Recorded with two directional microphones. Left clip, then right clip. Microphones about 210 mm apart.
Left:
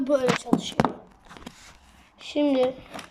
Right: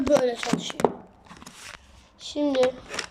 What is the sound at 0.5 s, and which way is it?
Speech, 15° left (ahead or behind).